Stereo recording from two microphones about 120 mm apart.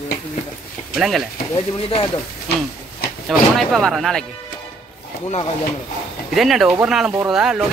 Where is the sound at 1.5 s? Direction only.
50° left (ahead or behind).